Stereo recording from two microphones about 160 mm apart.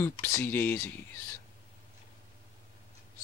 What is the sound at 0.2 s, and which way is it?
Speech, 15° left (ahead or behind).